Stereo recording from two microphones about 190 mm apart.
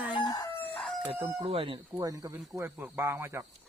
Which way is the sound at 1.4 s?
30° right (ahead or behind).